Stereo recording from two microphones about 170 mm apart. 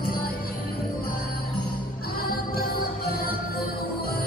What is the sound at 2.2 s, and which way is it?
Music, 60° left (ahead or behind).